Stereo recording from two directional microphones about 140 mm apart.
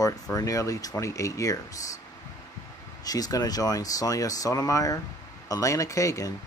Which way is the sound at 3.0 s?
25° left (ahead or behind).